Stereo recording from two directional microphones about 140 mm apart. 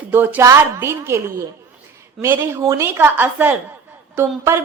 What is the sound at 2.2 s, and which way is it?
A woman's voice, 15° right (ahead or behind).